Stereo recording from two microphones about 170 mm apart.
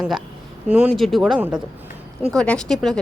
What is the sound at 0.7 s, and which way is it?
Speech, centre (ahead or behind).